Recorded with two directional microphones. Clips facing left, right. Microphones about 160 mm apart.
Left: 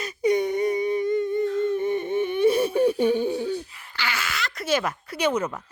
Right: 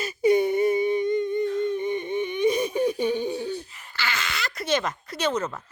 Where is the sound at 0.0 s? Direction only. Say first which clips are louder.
Right 2 dB; 5° right (ahead or behind).